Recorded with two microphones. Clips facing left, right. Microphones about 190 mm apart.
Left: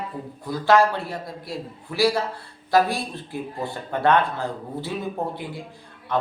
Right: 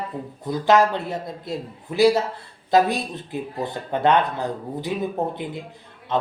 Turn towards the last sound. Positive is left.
turn(degrees=-20)  # may be behind; listen again after turning